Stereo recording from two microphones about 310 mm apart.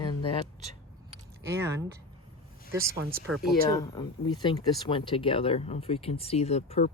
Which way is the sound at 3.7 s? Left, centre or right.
Centre.